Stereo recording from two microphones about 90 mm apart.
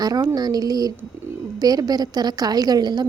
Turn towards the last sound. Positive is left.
turn(degrees=-50)  # may be behind; listen again after turning